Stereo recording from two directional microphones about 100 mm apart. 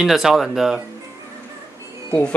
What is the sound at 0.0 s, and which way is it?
Speech, 5° right (ahead or behind).